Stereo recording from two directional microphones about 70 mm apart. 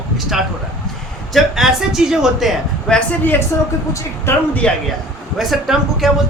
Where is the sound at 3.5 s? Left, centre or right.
Left.